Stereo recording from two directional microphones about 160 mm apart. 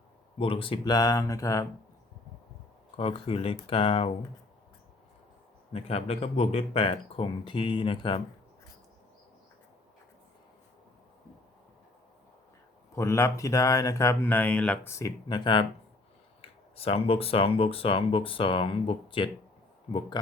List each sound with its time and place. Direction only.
0.3 s speech: 35° left (ahead or behind)
2.9 s speech: 35° left (ahead or behind)
5.7 s speech: 40° left (ahead or behind)
13.0 s speech: 15° left (ahead or behind)
14.9 s speech: 20° left (ahead or behind)
16.4 s speech: 40° left (ahead or behind)